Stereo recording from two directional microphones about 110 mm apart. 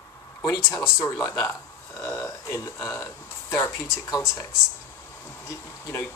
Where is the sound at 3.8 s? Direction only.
5° right (ahead or behind).